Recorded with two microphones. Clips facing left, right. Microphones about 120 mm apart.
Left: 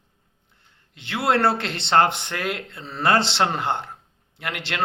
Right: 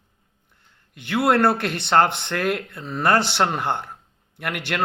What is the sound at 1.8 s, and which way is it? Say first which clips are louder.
Speech: even; 15° left (ahead or behind).